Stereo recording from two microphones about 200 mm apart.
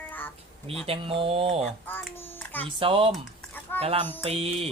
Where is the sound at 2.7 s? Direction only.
25° right (ahead or behind).